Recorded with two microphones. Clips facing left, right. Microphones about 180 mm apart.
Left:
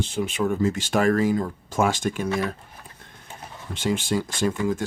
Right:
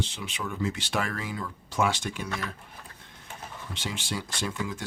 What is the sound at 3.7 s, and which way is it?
Speech, 50° left (ahead or behind).